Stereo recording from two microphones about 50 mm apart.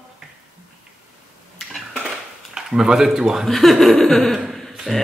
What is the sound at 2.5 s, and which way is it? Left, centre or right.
Speech, centre.